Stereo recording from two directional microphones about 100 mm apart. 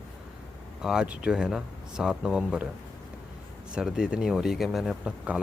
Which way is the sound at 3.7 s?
5° right (ahead or behind).